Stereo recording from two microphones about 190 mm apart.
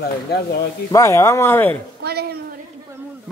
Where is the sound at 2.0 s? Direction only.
60° right (ahead or behind).